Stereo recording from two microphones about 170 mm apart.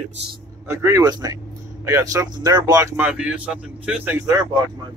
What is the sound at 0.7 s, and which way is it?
Speech, 15° right (ahead or behind).